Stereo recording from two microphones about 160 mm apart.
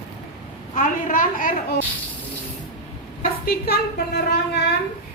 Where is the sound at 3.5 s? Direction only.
75° left (ahead or behind).